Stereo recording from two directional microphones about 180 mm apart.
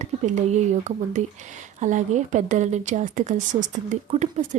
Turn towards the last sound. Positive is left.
turn(degrees=-40)  # may be behind; listen again after turning